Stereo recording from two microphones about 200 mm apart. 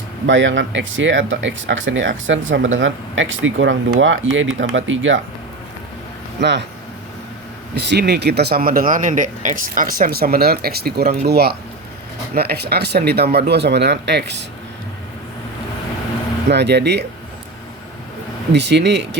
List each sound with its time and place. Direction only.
0.3 s speech: 65° right (ahead or behind)
6.4 s speech: 60° right (ahead or behind)
7.9 s speech: 55° right (ahead or behind)
16.5 s speech: 60° right (ahead or behind)
18.5 s speech: 60° right (ahead or behind)